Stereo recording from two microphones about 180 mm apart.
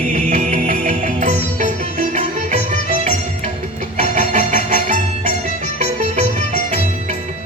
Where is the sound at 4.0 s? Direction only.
45° right (ahead or behind).